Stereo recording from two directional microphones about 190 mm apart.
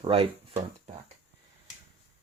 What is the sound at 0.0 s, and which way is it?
Speech, 30° right (ahead or behind).